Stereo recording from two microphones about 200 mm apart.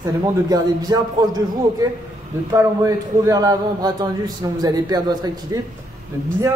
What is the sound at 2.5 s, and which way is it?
A man's voice, 15° right (ahead or behind).